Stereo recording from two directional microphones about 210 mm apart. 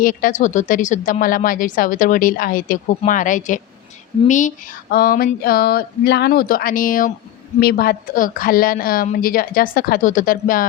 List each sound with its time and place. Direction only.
0.0 s a woman's voice: 40° left (ahead or behind)